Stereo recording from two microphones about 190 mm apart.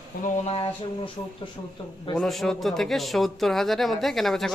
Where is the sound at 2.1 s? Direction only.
Centre (ahead or behind).